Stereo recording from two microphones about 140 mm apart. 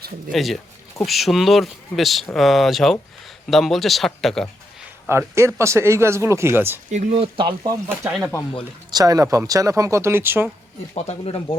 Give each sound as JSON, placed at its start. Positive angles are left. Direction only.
{"t": 0.3, "sound": "speech", "side_deg": 0}
{"t": 5.0, "sound": "speech", "side_deg": -20}
{"t": 6.9, "sound": "speech", "side_deg": -50}
{"t": 8.9, "sound": "speech", "side_deg": -25}
{"t": 10.9, "sound": "speech", "side_deg": 45}